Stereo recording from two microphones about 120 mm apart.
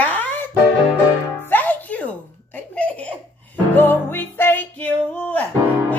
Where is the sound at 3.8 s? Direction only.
15° left (ahead or behind).